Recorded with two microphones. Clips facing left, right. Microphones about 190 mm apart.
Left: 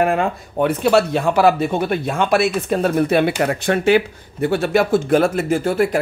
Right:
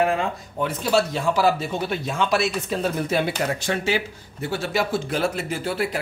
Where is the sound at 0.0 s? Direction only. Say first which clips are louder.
Left 4 dB; 60° left (ahead or behind).